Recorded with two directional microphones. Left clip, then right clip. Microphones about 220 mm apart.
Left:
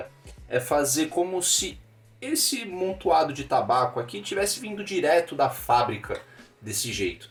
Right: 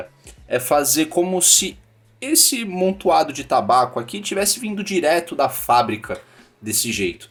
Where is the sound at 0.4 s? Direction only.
50° right (ahead or behind).